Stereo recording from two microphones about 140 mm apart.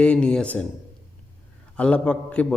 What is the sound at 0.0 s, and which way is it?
Speech, 5° left (ahead or behind).